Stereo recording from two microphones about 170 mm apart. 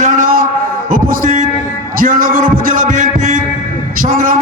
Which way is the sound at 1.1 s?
50° right (ahead or behind).